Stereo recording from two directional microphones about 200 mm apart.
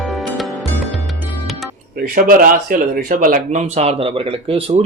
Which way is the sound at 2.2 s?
45° right (ahead or behind).